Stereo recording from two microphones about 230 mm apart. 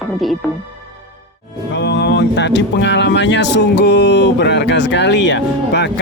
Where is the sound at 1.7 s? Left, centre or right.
Left.